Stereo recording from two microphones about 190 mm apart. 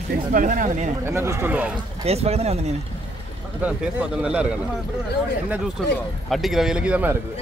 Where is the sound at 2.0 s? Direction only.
35° right (ahead or behind).